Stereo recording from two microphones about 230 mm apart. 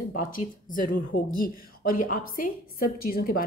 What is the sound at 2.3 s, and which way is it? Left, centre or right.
Speech, left.